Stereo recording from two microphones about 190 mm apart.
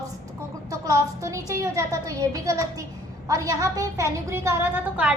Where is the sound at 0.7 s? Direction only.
15° right (ahead or behind).